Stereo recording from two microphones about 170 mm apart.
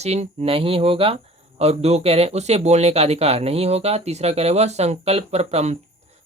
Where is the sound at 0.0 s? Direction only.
40° right (ahead or behind).